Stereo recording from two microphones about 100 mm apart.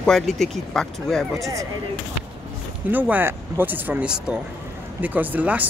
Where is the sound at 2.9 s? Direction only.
15° right (ahead or behind).